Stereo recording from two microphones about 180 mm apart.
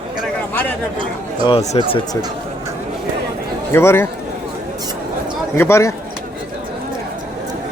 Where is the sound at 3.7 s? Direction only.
15° left (ahead or behind).